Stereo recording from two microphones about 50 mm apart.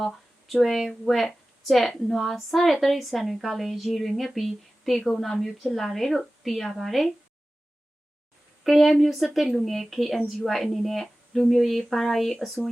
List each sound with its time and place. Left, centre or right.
0.0 s a woman's voice: centre
8.6 s a woman's voice: centre